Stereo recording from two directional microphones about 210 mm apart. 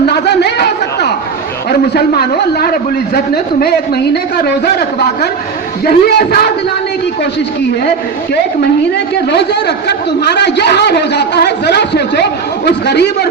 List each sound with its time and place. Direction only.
0.0 s a sound: 50° left (ahead or behind)
1.7 s a man's voice: 50° left (ahead or behind)
9.3 s a man's voice: 55° left (ahead or behind)